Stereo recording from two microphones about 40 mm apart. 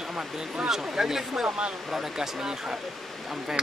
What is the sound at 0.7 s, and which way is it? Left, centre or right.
Speech, centre.